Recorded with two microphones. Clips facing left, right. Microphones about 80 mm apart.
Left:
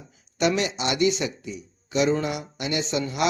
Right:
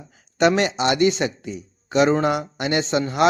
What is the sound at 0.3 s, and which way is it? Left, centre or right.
A man's voice, right.